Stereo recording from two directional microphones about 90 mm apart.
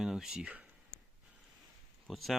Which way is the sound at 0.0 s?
5° right (ahead or behind).